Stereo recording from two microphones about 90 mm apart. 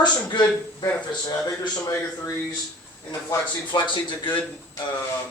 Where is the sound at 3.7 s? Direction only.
60° left (ahead or behind).